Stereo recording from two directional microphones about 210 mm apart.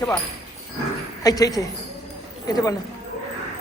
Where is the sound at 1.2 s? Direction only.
15° left (ahead or behind).